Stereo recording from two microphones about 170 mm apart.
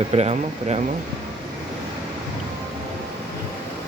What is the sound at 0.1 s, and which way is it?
Speech, 40° right (ahead or behind).